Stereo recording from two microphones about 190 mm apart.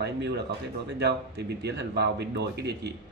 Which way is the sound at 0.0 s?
65° right (ahead or behind).